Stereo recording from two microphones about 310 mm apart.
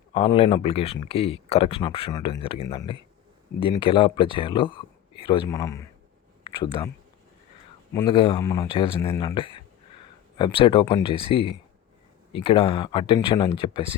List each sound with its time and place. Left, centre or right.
0.1 s speech: centre
7.9 s speech: centre